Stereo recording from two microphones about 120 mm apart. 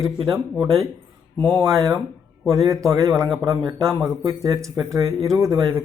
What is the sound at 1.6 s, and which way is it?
Speech, 25° right (ahead or behind).